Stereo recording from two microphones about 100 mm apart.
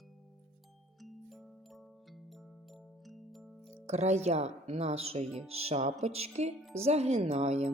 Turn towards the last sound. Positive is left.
turn(degrees=-90)